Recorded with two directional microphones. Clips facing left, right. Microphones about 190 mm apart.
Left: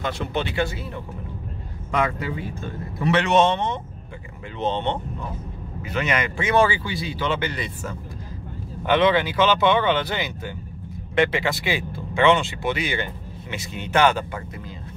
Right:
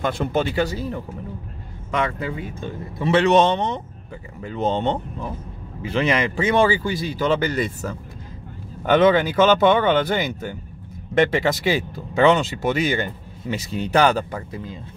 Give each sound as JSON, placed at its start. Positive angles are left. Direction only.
{"t": 0.0, "sound": "speech", "side_deg": -45}
{"t": 3.0, "sound": "speech", "side_deg": -30}
{"t": 5.8, "sound": "speech", "side_deg": -30}
{"t": 8.8, "sound": "speech", "side_deg": -45}